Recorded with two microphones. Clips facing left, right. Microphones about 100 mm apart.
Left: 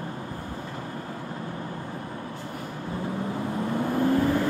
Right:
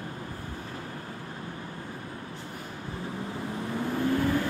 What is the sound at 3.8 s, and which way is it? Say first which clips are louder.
Vehicle: left 4 dB; 45° left (ahead or behind).